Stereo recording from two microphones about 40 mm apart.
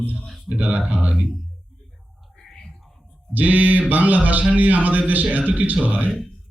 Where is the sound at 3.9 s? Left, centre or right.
Right.